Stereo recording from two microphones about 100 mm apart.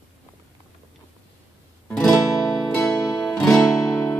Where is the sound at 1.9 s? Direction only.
10° left (ahead or behind).